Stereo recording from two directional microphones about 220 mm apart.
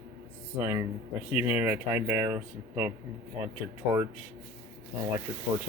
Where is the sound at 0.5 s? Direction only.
10° right (ahead or behind).